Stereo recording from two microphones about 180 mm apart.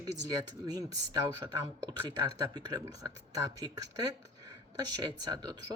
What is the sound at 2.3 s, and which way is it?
A woman's voice, 20° right (ahead or behind).